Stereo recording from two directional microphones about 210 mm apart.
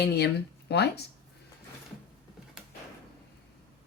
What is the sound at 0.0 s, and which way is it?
Speech, 50° left (ahead or behind).